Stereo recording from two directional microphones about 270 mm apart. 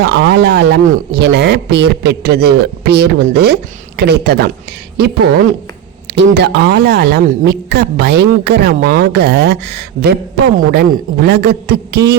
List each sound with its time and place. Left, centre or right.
0.0 s a woman's voice: right